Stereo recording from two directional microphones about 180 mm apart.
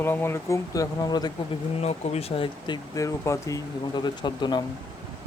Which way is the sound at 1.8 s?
35° left (ahead or behind).